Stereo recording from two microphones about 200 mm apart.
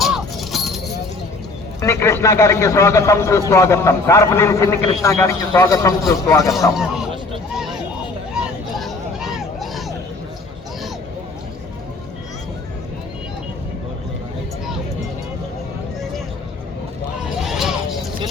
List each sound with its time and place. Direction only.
0.0 s music: centre (ahead or behind)
1.8 s a man's voice: 15° left (ahead or behind)
6.7 s a man's voice: centre (ahead or behind)
7.5 s a sound: centre (ahead or behind)
8.3 s hubbub: centre (ahead or behind)
17.5 s a sound: centre (ahead or behind)